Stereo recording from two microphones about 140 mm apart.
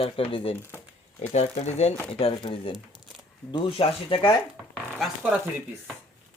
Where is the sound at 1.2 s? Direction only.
50° left (ahead or behind).